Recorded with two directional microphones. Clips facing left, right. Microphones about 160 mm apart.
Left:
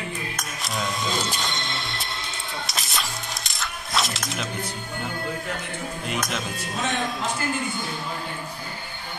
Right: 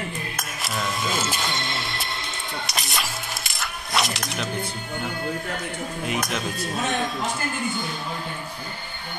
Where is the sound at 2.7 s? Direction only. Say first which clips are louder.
Right 2 dB; centre (ahead or behind).